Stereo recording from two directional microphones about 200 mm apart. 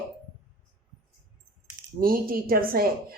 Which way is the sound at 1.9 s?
45° right (ahead or behind).